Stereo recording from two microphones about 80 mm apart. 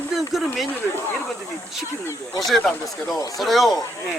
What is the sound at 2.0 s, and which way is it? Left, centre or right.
Speech, left.